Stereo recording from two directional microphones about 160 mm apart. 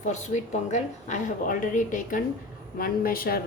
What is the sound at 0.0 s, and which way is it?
A woman's voice, 50° left (ahead or behind).